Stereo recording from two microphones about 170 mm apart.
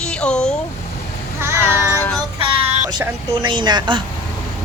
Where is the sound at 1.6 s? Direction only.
15° left (ahead or behind).